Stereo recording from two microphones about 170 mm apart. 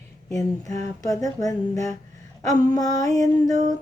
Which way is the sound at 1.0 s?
20° left (ahead or behind).